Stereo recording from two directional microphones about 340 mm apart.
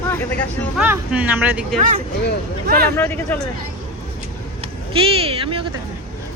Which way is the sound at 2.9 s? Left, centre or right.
Centre.